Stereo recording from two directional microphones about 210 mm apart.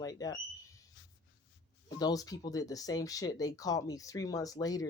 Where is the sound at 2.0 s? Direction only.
20° left (ahead or behind).